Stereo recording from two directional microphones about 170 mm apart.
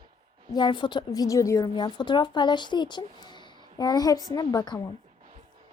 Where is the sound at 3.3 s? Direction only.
25° left (ahead or behind).